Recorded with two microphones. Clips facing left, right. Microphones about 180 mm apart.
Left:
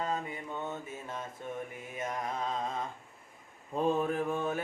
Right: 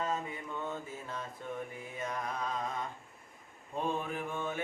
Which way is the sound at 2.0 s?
25° left (ahead or behind).